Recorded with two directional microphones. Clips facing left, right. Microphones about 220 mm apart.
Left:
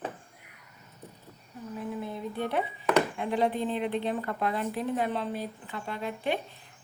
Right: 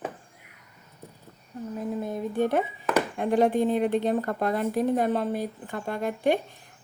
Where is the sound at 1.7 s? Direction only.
40° right (ahead or behind).